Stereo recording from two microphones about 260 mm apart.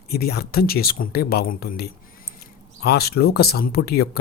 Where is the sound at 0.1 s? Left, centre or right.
Left.